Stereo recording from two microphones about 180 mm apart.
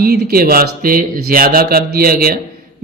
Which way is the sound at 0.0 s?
60° right (ahead or behind).